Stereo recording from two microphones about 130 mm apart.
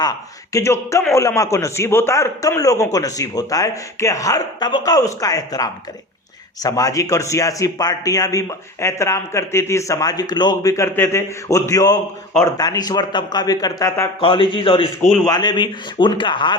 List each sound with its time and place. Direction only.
0.0 s a man's voice: 25° left (ahead or behind)
14.2 s speech: 40° left (ahead or behind)